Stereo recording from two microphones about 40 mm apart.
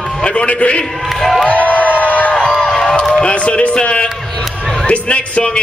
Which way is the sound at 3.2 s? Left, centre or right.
Left.